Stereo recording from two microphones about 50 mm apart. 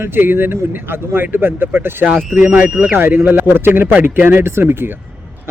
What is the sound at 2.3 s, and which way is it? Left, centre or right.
Speech, right.